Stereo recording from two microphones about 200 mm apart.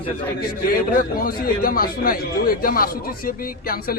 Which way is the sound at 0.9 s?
45° left (ahead or behind).